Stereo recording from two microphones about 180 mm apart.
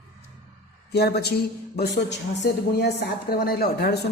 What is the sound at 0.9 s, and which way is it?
A woman's voice, 65° left (ahead or behind).